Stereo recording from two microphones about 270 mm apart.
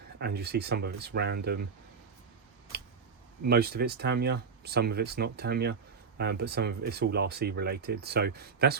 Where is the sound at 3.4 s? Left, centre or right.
Right.